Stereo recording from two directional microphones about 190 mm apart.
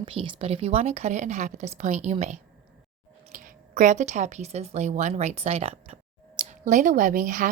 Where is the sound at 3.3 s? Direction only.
40° right (ahead or behind).